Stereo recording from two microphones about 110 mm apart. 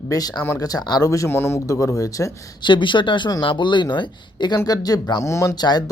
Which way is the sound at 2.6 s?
45° left (ahead or behind).